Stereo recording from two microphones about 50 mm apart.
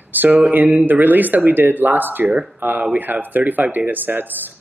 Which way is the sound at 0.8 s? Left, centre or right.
Right.